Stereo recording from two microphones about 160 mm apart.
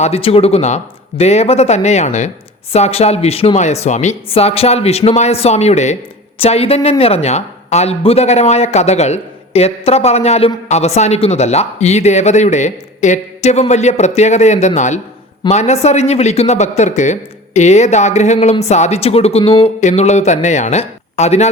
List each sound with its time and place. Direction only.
0.0 s speech: 40° left (ahead or behind)